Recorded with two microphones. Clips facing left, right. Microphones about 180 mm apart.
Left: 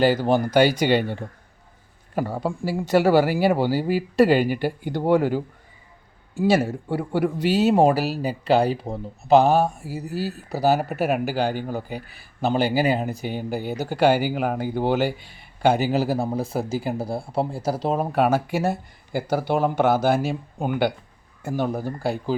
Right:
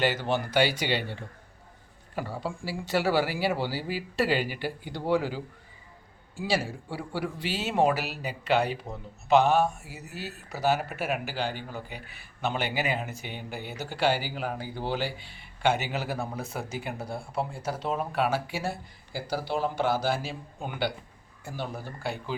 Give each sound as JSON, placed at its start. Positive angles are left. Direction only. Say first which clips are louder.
{"t": 0.0, "sound": "speech", "louder": "left 8 dB", "side_deg": 40}